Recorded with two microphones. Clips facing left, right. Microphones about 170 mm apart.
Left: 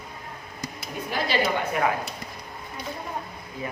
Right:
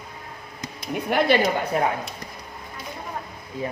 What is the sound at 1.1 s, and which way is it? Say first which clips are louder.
Speech: right 8 dB; 65° right (ahead or behind).